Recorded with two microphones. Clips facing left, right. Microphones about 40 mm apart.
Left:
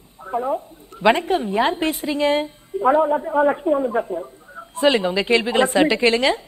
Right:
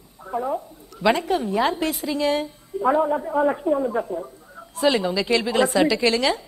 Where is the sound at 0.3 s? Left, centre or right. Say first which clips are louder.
Left 3 dB; left.